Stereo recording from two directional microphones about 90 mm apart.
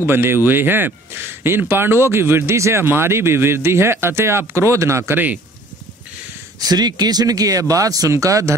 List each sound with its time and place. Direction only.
0.0 s speech: 25° right (ahead or behind)
6.6 s speech: 50° right (ahead or behind)